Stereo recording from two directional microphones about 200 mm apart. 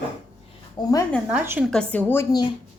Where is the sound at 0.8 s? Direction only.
20° left (ahead or behind).